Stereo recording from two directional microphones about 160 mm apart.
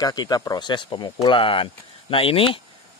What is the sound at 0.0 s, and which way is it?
Speech, 25° left (ahead or behind).